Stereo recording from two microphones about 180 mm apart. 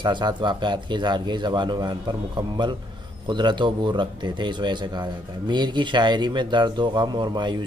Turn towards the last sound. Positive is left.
turn(degrees=-25)  # may be behind; listen again after turning